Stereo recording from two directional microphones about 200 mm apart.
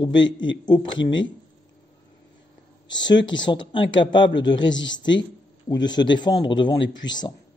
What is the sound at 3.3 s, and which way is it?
A man's voice, 25° left (ahead or behind).